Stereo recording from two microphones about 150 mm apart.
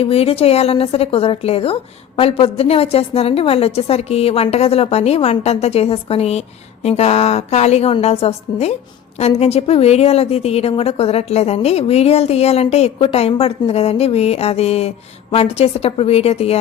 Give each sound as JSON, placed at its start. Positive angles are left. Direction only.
{"t": 0.0, "sound": "a woman's voice", "side_deg": 40}